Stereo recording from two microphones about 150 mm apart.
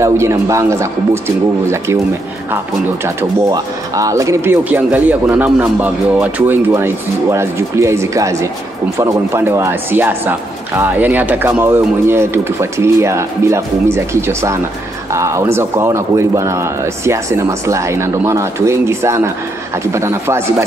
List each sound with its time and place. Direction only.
0.0 s speech: 20° right (ahead or behind)
3.2 s speech: 25° right (ahead or behind)